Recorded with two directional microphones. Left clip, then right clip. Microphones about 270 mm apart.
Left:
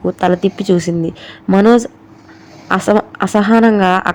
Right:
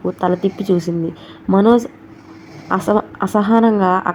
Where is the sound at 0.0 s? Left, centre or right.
Left.